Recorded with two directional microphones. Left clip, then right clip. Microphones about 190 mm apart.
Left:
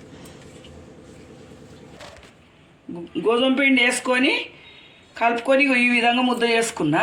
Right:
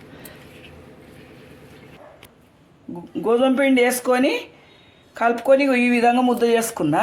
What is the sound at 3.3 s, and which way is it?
Speech, 45° right (ahead or behind).